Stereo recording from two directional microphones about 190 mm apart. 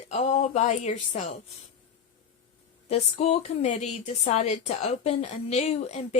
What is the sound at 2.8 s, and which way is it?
A woman's voice, 35° left (ahead or behind).